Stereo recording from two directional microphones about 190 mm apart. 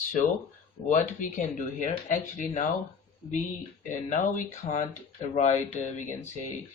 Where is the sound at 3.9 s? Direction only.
40° left (ahead or behind).